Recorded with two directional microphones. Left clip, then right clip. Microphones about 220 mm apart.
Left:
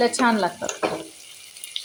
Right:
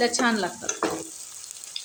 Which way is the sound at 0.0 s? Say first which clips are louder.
Left 4 dB; 5° left (ahead or behind).